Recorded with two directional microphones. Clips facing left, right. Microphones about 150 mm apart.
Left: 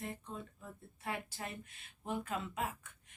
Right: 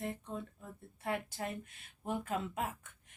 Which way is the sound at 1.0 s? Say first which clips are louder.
Right 4 dB; 50° right (ahead or behind).